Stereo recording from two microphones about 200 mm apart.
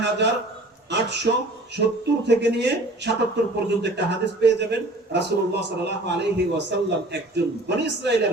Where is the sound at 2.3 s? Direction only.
60° right (ahead or behind).